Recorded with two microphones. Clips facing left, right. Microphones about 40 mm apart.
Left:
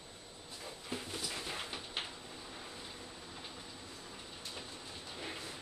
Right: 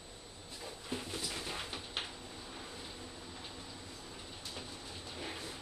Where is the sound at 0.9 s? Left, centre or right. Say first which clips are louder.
Right 1 dB; centre.